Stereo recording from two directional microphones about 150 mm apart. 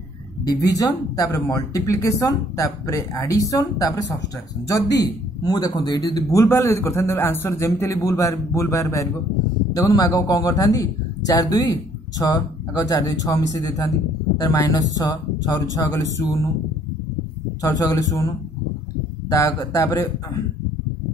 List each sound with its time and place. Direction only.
0.5 s a man's voice: 25° left (ahead or behind)
17.6 s a man's voice: 25° left (ahead or behind)
19.3 s a man's voice: 20° left (ahead or behind)